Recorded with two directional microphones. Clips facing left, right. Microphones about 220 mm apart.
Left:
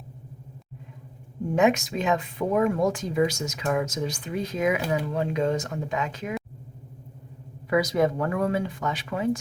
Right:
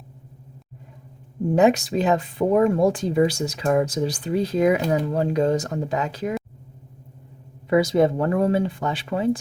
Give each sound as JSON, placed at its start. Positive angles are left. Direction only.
{"t": 1.5, "sound": "speech", "side_deg": -35}
{"t": 7.7, "sound": "speech", "side_deg": -30}